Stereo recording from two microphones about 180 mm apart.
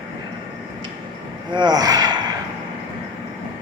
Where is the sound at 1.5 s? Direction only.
25° right (ahead or behind).